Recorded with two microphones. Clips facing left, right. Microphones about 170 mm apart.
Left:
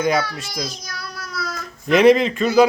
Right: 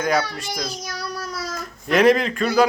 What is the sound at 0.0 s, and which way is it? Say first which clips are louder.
Speech: left 2 dB; centre (ahead or behind).